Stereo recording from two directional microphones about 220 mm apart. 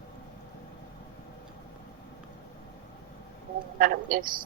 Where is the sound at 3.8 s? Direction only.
40° right (ahead or behind).